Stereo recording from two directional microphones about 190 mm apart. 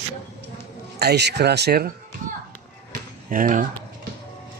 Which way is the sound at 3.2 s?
45° right (ahead or behind).